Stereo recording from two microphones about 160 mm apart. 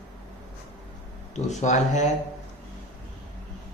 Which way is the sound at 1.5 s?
45° left (ahead or behind).